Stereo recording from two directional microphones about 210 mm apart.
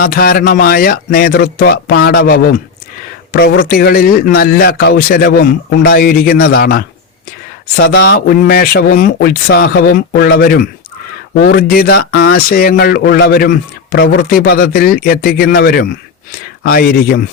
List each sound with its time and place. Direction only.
0.0 s speech: 45° left (ahead or behind)